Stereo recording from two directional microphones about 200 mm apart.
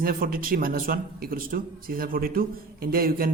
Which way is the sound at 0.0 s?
45° right (ahead or behind).